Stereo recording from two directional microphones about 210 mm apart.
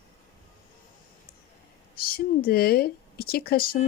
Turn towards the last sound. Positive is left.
turn(degrees=45)  # may be behind; listen again after turning